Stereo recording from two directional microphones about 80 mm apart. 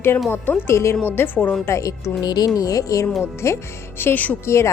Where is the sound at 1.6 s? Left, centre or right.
Left.